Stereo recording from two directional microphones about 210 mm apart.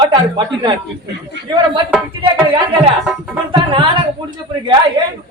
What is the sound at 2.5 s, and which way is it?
A woman's voice, 25° right (ahead or behind).